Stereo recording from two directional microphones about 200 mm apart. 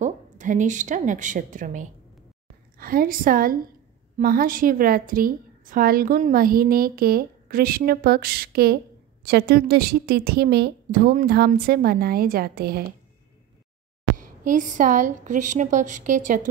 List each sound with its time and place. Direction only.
0.0 s a woman's voice: 40° right (ahead or behind)
14.1 s a woman's voice: 40° right (ahead or behind)